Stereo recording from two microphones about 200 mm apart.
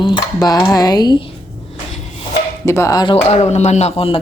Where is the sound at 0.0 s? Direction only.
20° left (ahead or behind).